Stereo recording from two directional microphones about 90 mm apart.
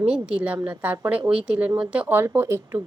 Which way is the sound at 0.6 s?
25° right (ahead or behind).